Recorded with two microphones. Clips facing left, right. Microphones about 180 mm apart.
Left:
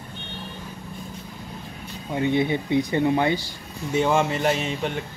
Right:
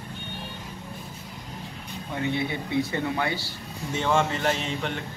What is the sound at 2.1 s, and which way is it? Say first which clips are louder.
Speech: left 6 dB; 20° left (ahead or behind).